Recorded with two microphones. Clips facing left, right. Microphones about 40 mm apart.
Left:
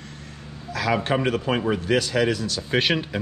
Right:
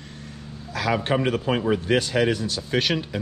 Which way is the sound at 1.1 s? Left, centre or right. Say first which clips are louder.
Even; centre.